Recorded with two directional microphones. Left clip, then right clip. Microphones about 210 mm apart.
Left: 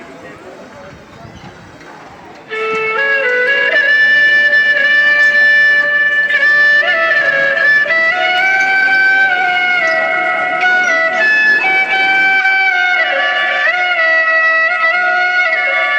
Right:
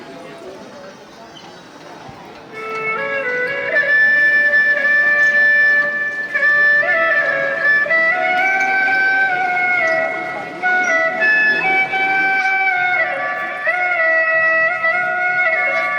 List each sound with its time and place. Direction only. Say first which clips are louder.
2.6 s music: left 7 dB; 55° left (ahead or behind)